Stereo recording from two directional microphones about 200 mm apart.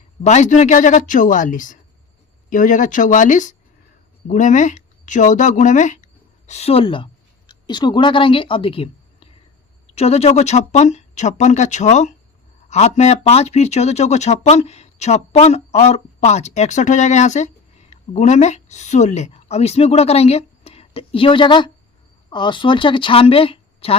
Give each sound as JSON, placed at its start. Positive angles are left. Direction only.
{"t": 0.3, "sound": "a woman's voice", "side_deg": 35}